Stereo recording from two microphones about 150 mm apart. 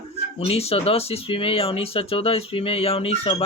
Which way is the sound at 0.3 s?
40° left (ahead or behind).